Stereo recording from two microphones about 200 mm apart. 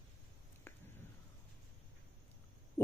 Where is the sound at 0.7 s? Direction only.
10° left (ahead or behind).